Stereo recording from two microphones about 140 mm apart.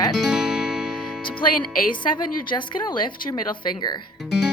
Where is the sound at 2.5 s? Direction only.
35° left (ahead or behind).